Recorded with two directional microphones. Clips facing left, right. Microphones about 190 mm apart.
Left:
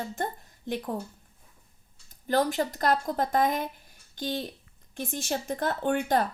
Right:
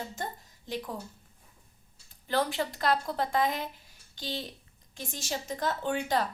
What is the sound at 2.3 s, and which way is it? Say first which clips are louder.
A woman's voice: left 4 dB; 45° left (ahead or behind).